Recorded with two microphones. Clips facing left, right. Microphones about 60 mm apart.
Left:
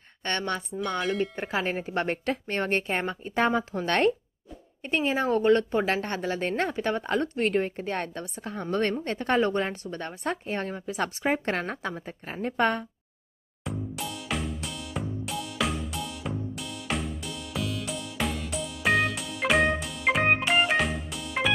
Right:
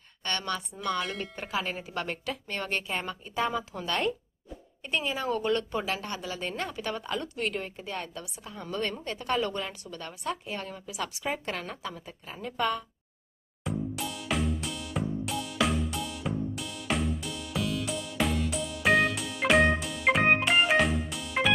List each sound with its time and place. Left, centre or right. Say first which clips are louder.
0.2 s a woman's voice: left 3 dB; left
0.7 s speech: left 6 dB; centre
1.3 s a woman's voice: left 4 dB; left
3.3 s speech: left 5 dB; left
4.8 s a woman's voice: left 5 dB; left
13.7 s music: right 1 dB; centre